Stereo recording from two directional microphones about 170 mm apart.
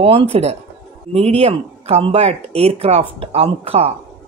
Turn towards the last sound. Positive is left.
turn(degrees=-35)  # may be behind; listen again after turning